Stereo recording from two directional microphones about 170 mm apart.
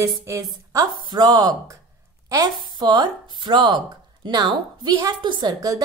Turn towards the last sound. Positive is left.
turn(degrees=-25)  # may be behind; listen again after turning